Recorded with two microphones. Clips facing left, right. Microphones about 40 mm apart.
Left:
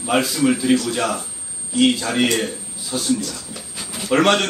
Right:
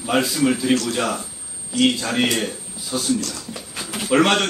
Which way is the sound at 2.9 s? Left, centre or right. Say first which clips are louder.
Even; centre.